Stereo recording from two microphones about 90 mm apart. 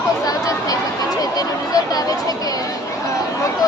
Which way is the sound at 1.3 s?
45° left (ahead or behind).